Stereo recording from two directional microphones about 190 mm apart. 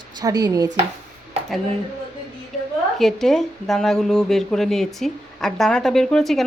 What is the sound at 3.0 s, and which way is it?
Speech, centre (ahead or behind).